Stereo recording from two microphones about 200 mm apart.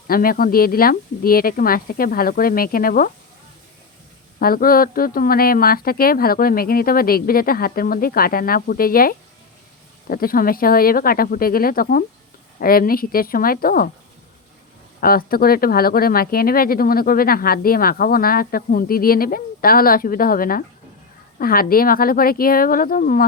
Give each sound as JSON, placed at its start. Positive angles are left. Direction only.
{"t": 0.1, "sound": "speech", "side_deg": 45}
{"t": 4.4, "sound": "speech", "side_deg": 45}
{"t": 15.0, "sound": "speech", "side_deg": 50}